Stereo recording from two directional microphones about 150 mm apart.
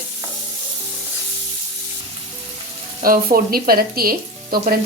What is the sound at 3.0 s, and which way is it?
Speech, 75° right (ahead or behind).